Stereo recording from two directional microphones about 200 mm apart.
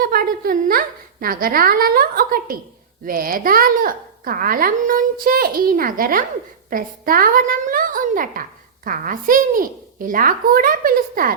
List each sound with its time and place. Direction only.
0.0 s a woman's voice: 50° right (ahead or behind)